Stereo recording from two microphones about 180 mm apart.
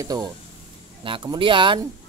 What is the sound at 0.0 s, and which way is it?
Speech, 20° right (ahead or behind).